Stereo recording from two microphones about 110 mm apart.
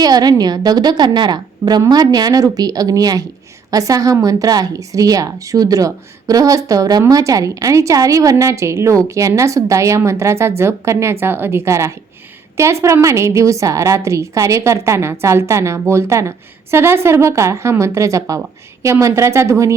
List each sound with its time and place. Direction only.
0.0 s a woman's voice: 35° right (ahead or behind)